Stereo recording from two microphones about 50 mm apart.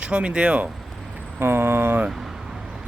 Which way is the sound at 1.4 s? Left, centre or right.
Right.